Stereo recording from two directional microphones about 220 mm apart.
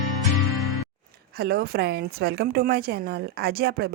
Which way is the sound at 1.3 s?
45° right (ahead or behind).